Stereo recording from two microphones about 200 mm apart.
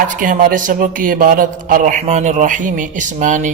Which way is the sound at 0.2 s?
40° right (ahead or behind).